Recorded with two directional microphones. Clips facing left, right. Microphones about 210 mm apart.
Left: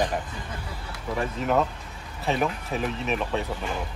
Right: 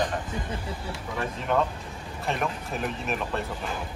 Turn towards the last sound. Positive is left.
turn(degrees=0)  # may be behind; listen again after turning